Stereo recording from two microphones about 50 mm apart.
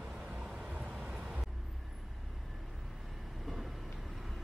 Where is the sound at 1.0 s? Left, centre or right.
Centre.